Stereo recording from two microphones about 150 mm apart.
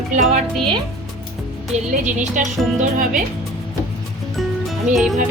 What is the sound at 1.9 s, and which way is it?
Speech, 55° right (ahead or behind).